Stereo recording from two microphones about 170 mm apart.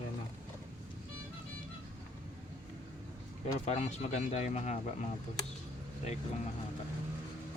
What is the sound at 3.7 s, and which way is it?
Speech, 40° left (ahead or behind).